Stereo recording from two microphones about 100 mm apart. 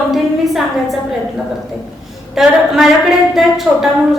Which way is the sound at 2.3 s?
5° right (ahead or behind).